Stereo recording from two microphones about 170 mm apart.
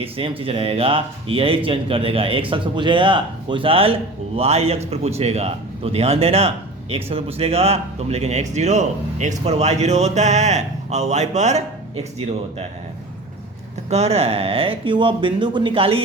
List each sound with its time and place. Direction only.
0.0 s speech: 35° right (ahead or behind)
13.9 s speech: 40° right (ahead or behind)